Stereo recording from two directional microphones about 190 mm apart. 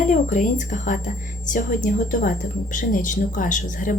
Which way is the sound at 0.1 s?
40° left (ahead or behind).